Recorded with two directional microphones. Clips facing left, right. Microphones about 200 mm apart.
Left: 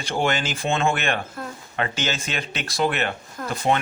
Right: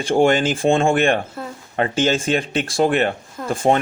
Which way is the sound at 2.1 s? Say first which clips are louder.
Right 10 dB; 30° right (ahead or behind).